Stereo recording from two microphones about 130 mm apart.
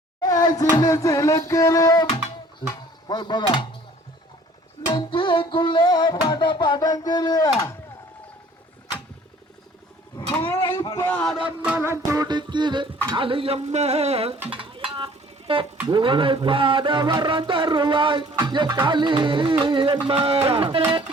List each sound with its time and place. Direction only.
0.2 s a sound: 30° left (ahead or behind)
2.6 s music: 35° left (ahead or behind)
4.9 s music: 40° left (ahead or behind)
10.4 s a sound: 20° left (ahead or behind)
10.9 s a man's voice: 15° left (ahead or behind)
11.3 s music: 10° right (ahead or behind); by 12.9 s 35° right (ahead or behind)
13.1 s speech: 40° right (ahead or behind)
14.5 s music: 45° right (ahead or behind)
15.9 s a sound: 40° right (ahead or behind)
20.1 s speech: 45° right (ahead or behind)